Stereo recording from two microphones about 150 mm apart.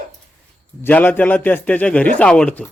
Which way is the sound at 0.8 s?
10° left (ahead or behind).